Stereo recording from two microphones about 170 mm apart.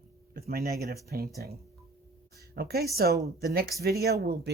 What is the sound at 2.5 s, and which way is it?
Speech, 65° right (ahead or behind).